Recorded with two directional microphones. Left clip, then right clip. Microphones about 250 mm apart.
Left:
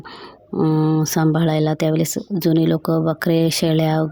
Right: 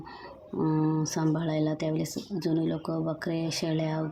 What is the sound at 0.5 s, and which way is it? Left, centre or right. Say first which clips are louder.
Speech: left 9 dB; left.